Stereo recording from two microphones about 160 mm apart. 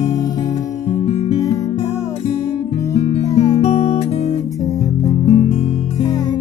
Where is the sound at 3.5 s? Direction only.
40° left (ahead or behind).